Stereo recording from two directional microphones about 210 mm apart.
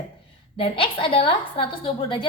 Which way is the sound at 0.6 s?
25° left (ahead or behind).